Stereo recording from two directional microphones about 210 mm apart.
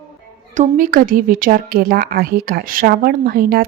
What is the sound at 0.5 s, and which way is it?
A woman's voice, 40° right (ahead or behind).